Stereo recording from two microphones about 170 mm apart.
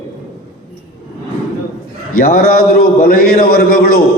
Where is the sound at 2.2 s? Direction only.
55° left (ahead or behind).